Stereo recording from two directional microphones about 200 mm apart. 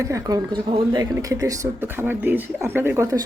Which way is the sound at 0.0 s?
20° right (ahead or behind).